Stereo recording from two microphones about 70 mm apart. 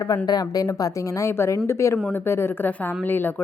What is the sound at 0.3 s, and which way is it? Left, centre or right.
A woman's voice, left.